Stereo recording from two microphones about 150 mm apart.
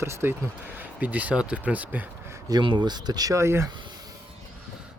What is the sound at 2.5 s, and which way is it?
Speech, 30° right (ahead or behind).